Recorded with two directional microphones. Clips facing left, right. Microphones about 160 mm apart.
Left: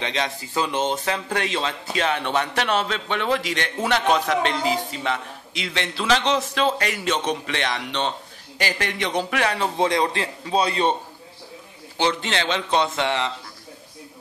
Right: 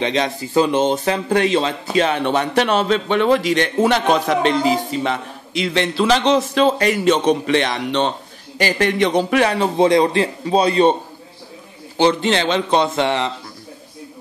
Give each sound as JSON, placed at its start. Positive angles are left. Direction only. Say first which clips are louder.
{"t": 0.0, "sound": "speech", "louder": "right 7 dB", "side_deg": -35}
{"t": 4.3, "sound": "music", "louder": "right 5 dB", "side_deg": -15}
{"t": 4.6, "sound": "a man's voice", "louder": "right 6 dB", "side_deg": -40}
{"t": 9.3, "sound": "a man's voice", "louder": "right 7 dB", "side_deg": -30}
{"t": 12.0, "sound": "speech", "louder": "right 7 dB", "side_deg": -35}